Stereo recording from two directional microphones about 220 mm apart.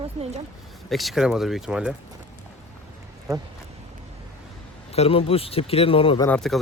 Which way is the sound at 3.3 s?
15° right (ahead or behind).